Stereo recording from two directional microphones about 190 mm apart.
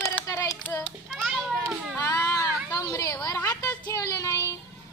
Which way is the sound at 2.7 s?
20° left (ahead or behind).